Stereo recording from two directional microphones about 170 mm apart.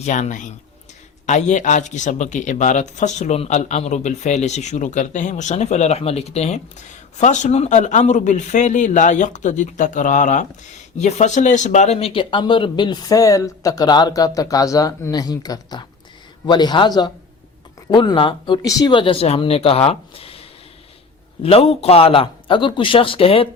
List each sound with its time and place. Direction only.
0.0 s speech: 45° left (ahead or behind)
21.4 s speech: 35° left (ahead or behind)